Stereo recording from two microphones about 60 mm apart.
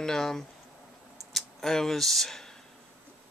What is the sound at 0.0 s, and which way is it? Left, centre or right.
Speech, centre.